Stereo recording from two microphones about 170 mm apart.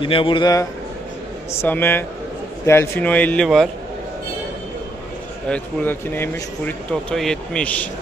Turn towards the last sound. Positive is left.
turn(degrees=5)  # may be behind; listen again after turning